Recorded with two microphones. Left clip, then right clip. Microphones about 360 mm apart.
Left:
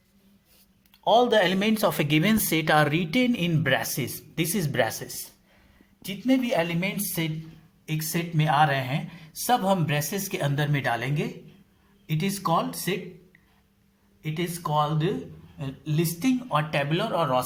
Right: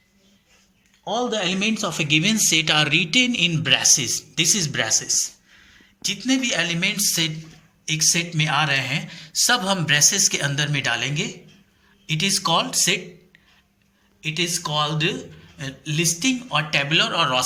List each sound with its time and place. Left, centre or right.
1.0 s a man's voice: left
14.2 s a man's voice: centre